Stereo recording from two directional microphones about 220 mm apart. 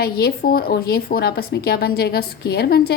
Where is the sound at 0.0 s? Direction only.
45° left (ahead or behind).